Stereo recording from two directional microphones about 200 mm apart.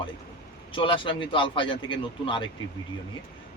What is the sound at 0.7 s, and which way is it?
Speech, 25° left (ahead or behind).